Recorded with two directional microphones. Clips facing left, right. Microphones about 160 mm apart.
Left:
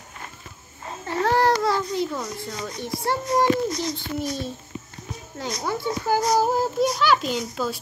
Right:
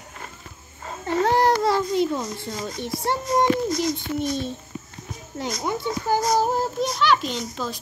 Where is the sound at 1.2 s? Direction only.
20° right (ahead or behind).